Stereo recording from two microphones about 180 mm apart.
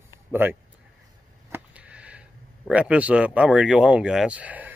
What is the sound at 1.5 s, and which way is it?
Speech, 5° right (ahead or behind).